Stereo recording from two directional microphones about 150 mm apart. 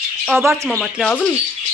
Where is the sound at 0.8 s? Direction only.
5° left (ahead or behind).